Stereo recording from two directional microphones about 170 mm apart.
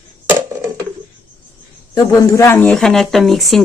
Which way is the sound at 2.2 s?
20° left (ahead or behind).